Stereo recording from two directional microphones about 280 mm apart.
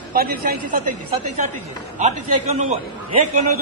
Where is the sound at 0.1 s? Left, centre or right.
Right.